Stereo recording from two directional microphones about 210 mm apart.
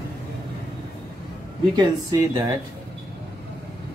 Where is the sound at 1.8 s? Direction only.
15° right (ahead or behind).